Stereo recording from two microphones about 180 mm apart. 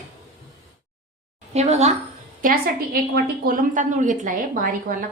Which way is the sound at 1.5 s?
40° right (ahead or behind).